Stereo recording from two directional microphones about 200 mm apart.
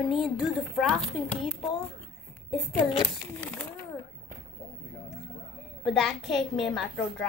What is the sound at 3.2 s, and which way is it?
Speech, 10° left (ahead or behind).